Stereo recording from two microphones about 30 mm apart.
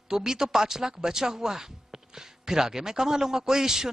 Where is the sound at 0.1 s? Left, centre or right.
Centre.